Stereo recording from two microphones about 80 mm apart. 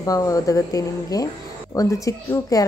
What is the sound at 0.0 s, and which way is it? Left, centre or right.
Speech, left.